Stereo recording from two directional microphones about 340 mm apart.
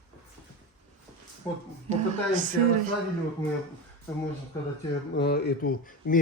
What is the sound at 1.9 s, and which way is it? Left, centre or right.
Speech, right.